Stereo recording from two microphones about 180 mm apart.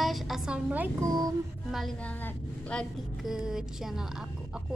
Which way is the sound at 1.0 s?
20° right (ahead or behind).